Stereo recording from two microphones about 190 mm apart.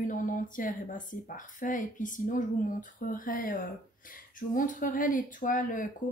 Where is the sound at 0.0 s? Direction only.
45° left (ahead or behind).